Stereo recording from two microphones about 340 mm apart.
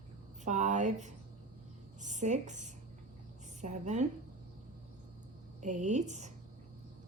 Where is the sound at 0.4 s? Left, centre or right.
Right.